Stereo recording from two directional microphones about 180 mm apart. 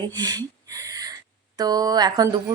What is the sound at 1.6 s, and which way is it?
Speech, 20° right (ahead or behind).